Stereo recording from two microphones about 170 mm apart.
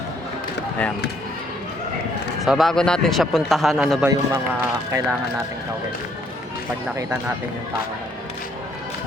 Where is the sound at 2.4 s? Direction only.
Centre (ahead or behind).